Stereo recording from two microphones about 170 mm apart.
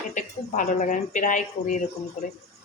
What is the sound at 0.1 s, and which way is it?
Speech, 45° left (ahead or behind).